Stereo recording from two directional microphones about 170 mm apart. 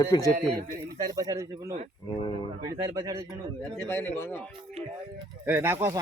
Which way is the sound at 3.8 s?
10° left (ahead or behind).